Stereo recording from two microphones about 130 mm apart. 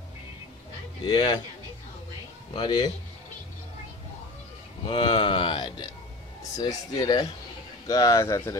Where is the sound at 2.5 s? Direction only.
35° left (ahead or behind).